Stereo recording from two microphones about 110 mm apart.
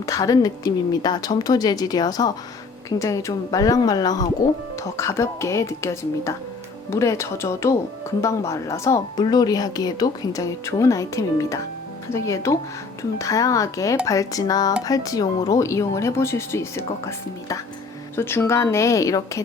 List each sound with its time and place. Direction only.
0.0 s speech: 30° left (ahead or behind)
9.2 s speech: 35° left (ahead or behind)